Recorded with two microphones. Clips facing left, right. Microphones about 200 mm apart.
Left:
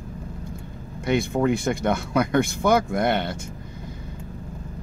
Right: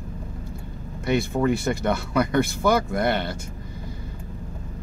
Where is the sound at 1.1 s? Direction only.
Centre (ahead or behind).